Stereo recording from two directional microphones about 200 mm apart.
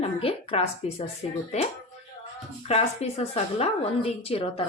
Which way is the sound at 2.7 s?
30° left (ahead or behind).